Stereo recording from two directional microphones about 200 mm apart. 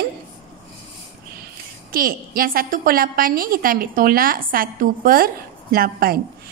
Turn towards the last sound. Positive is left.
turn(degrees=-50)  # may be behind; listen again after turning